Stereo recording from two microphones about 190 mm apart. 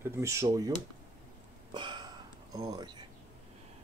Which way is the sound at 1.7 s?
25° right (ahead or behind).